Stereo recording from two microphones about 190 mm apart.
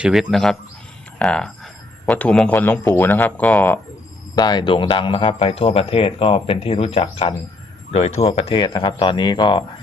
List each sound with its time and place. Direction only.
0.0 s a man's voice: centre (ahead or behind)
4.4 s speech: 20° left (ahead or behind)